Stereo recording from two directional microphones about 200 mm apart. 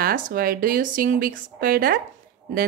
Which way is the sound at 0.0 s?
45° right (ahead or behind).